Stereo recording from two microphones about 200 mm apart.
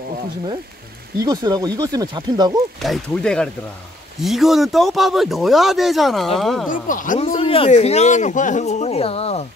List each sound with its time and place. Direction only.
1.2 s speech: 20° right (ahead or behind)
2.8 s speech: centre (ahead or behind)
6.7 s speech: 40° left (ahead or behind)